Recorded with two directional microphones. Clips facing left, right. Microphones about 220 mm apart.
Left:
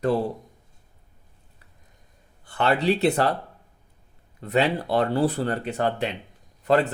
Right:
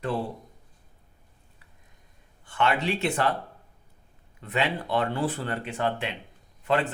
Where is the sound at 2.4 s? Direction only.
35° left (ahead or behind).